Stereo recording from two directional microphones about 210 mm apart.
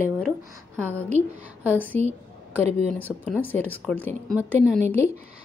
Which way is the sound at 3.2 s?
10° left (ahead or behind).